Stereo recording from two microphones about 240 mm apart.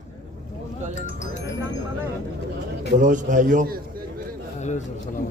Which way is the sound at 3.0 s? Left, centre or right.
Right.